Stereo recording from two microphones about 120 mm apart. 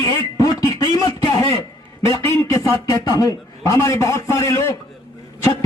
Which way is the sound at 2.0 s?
25° left (ahead or behind).